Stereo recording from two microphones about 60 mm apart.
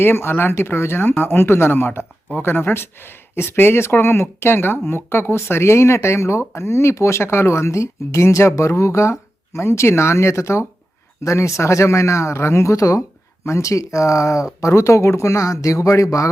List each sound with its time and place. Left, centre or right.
0.0 s speech: left
14.7 s speech: left